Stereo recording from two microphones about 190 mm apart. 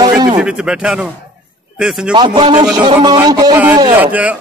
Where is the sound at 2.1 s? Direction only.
25° right (ahead or behind).